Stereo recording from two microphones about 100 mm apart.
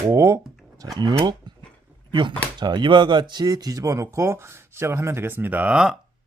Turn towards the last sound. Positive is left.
turn(degrees=-10)  # may be behind; listen again after turning